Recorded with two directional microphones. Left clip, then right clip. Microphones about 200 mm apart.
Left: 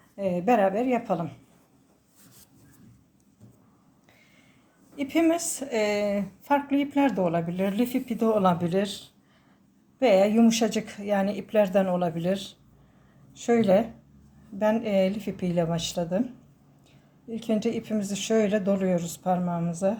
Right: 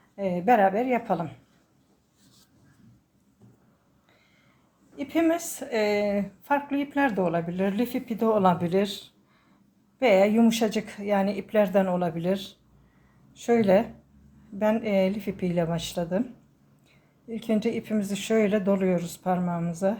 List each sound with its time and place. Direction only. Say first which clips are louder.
0.2 s speech: right 2 dB; 15° left (ahead or behind)
4.9 s a woman's voice: left 1 dB; 20° left (ahead or behind)
17.2 s speech: even; 10° left (ahead or behind)